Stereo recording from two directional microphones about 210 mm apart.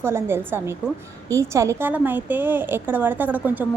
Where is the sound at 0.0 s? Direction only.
10° right (ahead or behind).